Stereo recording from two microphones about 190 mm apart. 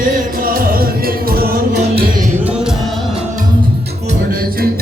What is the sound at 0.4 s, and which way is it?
Music, 50° right (ahead or behind).